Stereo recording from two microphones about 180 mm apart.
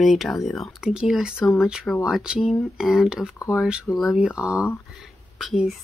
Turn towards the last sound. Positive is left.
turn(degrees=0)  # may be behind; listen again after turning